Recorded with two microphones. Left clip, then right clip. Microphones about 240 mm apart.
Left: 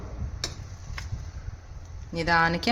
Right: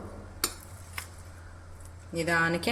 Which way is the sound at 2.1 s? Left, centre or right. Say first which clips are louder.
Left 4 dB; left.